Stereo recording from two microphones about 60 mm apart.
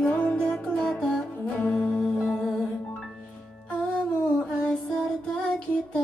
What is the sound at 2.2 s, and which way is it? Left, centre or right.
Music, centre.